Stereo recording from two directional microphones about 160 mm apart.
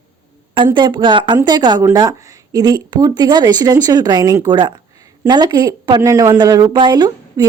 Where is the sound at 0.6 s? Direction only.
30° right (ahead or behind).